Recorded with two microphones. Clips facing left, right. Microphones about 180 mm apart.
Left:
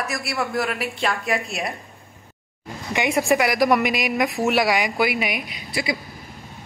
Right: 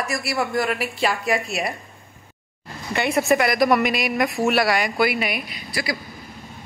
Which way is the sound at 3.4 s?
10° left (ahead or behind).